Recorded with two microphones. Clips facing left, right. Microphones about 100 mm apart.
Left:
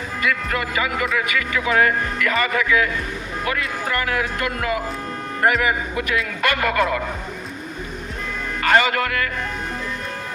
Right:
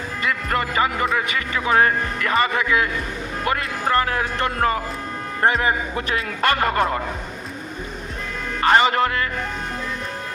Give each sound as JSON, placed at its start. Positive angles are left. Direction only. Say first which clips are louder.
{"t": 0.2, "sound": "speech", "louder": "even", "side_deg": -35}
{"t": 8.6, "sound": "speech", "louder": "right 2 dB", "side_deg": -30}